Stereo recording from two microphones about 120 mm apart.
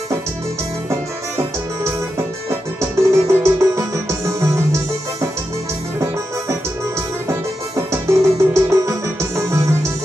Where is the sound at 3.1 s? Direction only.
20° right (ahead or behind).